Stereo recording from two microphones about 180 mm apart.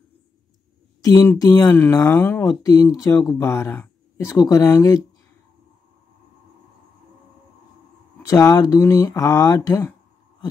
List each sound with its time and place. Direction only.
1.0 s speech: 15° left (ahead or behind)
8.3 s speech: 20° left (ahead or behind)